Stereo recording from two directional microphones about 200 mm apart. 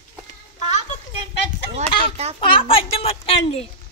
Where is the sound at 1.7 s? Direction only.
30° right (ahead or behind).